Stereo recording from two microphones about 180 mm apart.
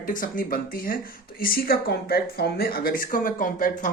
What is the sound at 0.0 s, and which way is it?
Speech, 50° left (ahead or behind).